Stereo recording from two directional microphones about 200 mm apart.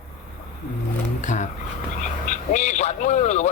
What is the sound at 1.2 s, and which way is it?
A man's voice, 40° left (ahead or behind).